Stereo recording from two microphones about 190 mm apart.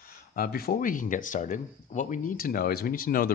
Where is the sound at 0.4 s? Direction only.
50° left (ahead or behind).